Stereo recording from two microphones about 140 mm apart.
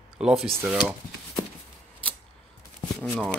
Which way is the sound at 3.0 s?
5° left (ahead or behind).